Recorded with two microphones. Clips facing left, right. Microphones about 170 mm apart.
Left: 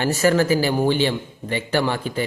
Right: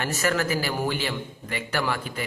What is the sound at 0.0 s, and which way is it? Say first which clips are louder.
A man's voice: left 7 dB; 35° left (ahead or behind).